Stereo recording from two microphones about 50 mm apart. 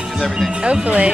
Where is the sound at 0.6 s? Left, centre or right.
Right.